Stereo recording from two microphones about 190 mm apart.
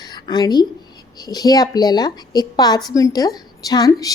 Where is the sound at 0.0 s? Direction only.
20° left (ahead or behind).